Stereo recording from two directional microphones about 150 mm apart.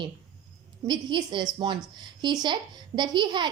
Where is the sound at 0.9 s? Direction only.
30° right (ahead or behind).